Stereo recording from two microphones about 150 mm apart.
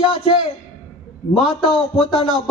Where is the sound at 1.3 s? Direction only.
40° left (ahead or behind).